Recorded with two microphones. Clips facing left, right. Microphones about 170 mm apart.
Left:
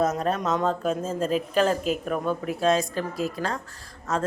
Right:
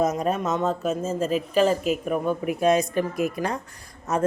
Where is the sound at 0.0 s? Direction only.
10° right (ahead or behind).